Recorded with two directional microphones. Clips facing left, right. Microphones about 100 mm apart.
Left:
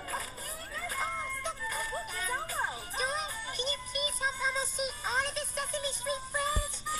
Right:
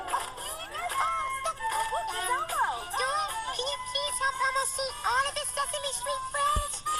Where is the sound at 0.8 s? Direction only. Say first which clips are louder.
Right 7 dB; 70° right (ahead or behind).